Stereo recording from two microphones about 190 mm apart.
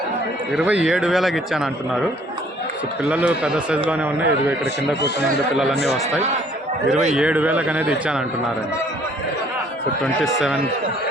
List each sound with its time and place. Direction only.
0.5 s speech: 5° right (ahead or behind)
3.1 s a man's voice: 5° right (ahead or behind)
4.6 s speech: 60° left (ahead or behind)
7.1 s a man's voice: 5° right (ahead or behind)